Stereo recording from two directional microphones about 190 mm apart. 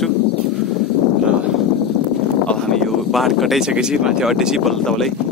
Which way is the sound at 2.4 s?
5° left (ahead or behind).